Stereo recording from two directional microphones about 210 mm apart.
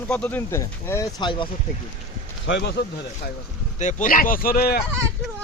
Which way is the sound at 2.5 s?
55° left (ahead or behind).